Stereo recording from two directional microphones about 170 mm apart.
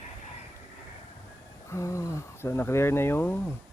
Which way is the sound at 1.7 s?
20° left (ahead or behind).